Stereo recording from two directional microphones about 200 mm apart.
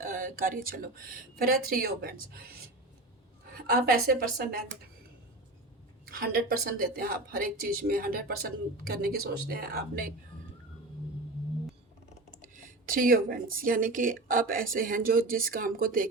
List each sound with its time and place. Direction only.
0.0 s speech: 45° right (ahead or behind)
3.7 s speech: 50° right (ahead or behind)
6.1 s a woman's voice: 50° right (ahead or behind)
12.3 s speech: 40° right (ahead or behind)